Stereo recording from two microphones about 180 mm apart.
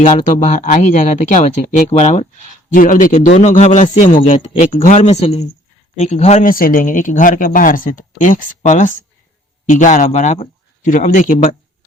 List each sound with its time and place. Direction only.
0.0 s speech: 40° left (ahead or behind)